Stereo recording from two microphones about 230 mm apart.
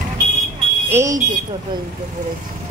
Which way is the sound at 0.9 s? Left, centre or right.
Centre.